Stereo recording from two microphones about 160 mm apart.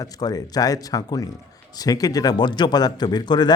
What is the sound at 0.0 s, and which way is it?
Speech, 25° left (ahead or behind).